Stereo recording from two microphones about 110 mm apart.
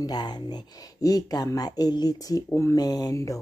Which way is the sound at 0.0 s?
40° left (ahead or behind).